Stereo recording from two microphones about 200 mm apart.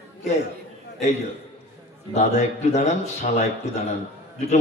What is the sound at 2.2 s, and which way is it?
A man's voice, 35° left (ahead or behind).